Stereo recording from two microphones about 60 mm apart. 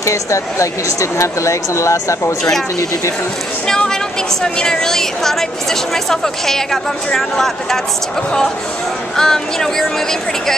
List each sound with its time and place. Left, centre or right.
0.0 s speech: left
3.6 s a woman's voice: centre
9.1 s a woman's voice: centre